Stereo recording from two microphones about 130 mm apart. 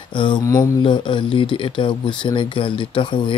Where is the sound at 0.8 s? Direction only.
35° left (ahead or behind).